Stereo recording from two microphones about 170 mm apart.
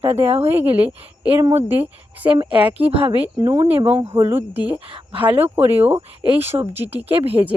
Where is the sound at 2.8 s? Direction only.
35° right (ahead or behind).